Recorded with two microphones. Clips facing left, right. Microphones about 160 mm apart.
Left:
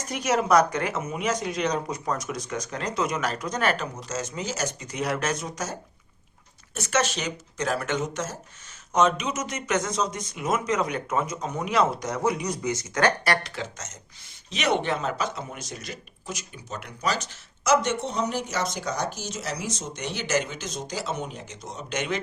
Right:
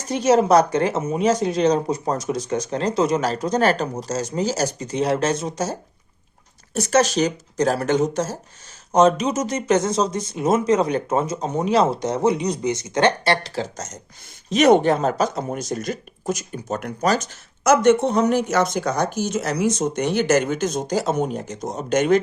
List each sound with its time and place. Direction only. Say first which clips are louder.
0.1 s speech: right 6 dB; 30° right (ahead or behind)
6.7 s speech: right 8 dB; 35° right (ahead or behind)